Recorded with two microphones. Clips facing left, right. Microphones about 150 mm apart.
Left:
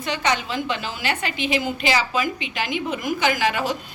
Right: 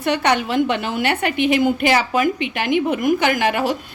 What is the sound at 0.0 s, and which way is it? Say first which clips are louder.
A woman's voice: right 6 dB; 65° right (ahead or behind).